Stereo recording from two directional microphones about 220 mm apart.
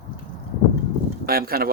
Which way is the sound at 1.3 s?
45° right (ahead or behind).